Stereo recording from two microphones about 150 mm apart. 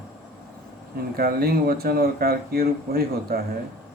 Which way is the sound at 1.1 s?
85° right.